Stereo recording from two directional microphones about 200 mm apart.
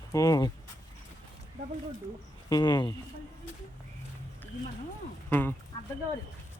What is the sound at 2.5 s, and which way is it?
Speech, 20° left (ahead or behind).